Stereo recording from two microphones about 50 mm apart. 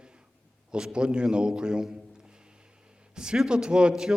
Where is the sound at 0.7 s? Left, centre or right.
Centre.